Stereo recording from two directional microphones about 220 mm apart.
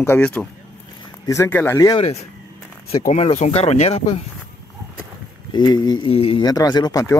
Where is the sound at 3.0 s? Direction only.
30° left (ahead or behind).